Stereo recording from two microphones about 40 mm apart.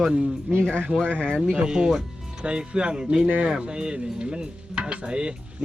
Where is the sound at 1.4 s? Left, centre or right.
Right.